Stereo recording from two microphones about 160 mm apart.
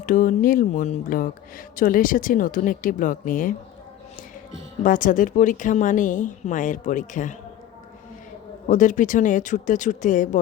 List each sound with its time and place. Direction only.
0.0 s speech: 55° left (ahead or behind)
4.8 s a woman's voice: 55° left (ahead or behind)
8.6 s a woman's voice: 55° left (ahead or behind)